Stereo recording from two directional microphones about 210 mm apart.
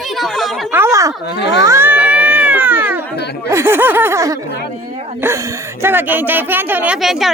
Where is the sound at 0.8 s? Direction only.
15° right (ahead or behind).